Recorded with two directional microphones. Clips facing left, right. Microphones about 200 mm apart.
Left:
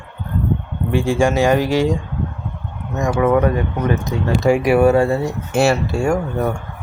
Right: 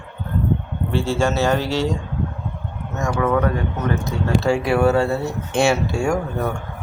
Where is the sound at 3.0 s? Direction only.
20° left (ahead or behind).